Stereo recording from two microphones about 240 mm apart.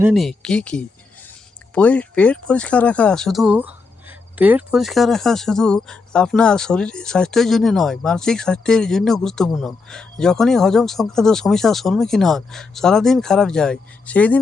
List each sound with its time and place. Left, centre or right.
0.0 s speech: centre